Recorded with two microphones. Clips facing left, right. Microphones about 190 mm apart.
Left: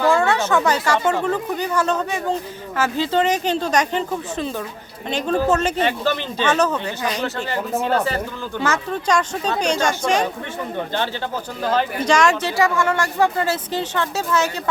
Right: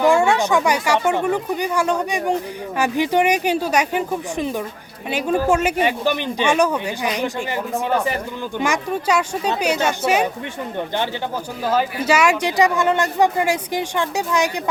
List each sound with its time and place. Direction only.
0.0 s speech: 15° right (ahead or behind)